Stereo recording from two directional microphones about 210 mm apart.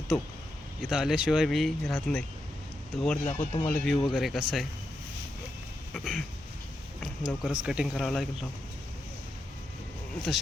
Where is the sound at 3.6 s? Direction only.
5° left (ahead or behind).